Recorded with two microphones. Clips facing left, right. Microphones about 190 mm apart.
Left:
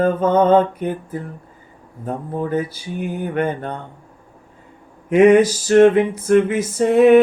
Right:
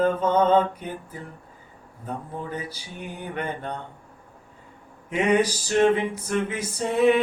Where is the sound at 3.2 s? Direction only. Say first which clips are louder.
Left 8 dB; 50° left (ahead or behind).